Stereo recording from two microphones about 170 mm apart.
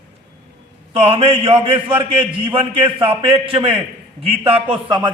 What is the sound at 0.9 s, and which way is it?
A man's voice, 35° right (ahead or behind).